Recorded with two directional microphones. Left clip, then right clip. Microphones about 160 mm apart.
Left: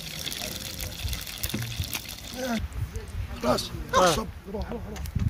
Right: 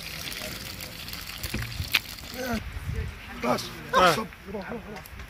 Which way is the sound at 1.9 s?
15° left (ahead or behind).